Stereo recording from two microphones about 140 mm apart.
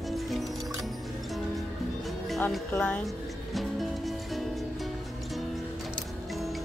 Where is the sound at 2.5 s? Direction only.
5° left (ahead or behind).